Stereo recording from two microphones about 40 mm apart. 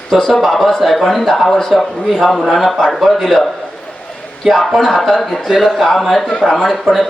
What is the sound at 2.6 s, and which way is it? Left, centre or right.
Speech, centre.